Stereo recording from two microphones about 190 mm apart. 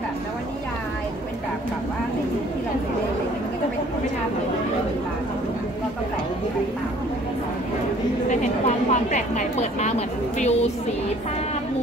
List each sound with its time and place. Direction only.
8.3 s speech: 40° left (ahead or behind)